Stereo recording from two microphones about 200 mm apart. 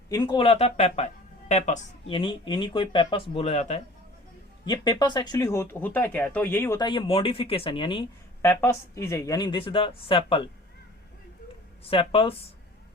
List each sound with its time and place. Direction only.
0.1 s speech: 25° left (ahead or behind)
4.6 s speech: 20° left (ahead or behind)
8.4 s speech: 10° left (ahead or behind)
11.9 s speech: 25° left (ahead or behind)